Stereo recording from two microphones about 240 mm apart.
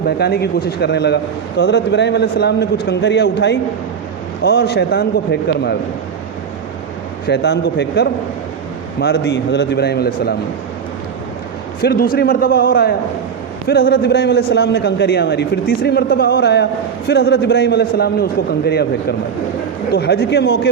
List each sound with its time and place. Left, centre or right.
0.2 s a man's voice: left
7.3 s a man's voice: left
11.8 s a man's voice: left